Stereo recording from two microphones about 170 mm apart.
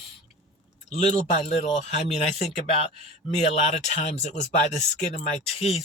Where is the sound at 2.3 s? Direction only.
35° left (ahead or behind).